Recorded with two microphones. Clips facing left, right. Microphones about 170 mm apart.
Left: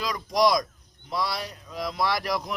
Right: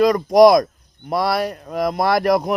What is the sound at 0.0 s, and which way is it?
A man's voice, 55° right (ahead or behind).